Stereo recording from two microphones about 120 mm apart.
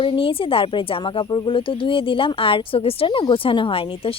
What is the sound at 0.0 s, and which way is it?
Speech, 50° left (ahead or behind).